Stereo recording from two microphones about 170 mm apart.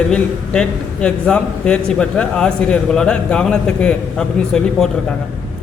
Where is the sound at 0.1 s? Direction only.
5° left (ahead or behind).